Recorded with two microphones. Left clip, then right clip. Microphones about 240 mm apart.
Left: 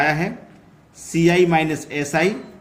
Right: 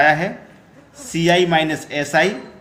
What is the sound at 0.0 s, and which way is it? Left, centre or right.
Speech, centre.